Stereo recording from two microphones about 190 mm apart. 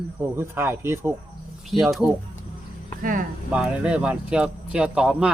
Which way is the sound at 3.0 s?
45° right (ahead or behind).